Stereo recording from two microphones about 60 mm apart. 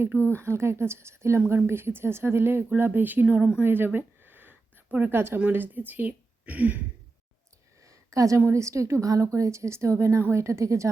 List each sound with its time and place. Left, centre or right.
0.3 s speech: right
3.6 s a sound: right
4.9 s a woman's voice: right
5.1 s a woman's voice: right
7.9 s a sound: right
8.4 s speech: right